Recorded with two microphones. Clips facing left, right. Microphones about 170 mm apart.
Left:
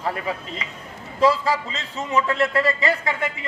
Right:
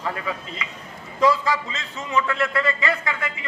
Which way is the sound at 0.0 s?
35° left (ahead or behind).